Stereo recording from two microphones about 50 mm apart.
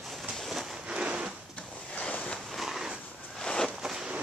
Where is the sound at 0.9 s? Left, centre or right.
Centre.